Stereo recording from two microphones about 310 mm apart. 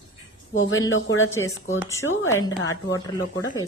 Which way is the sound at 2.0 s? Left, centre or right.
Left.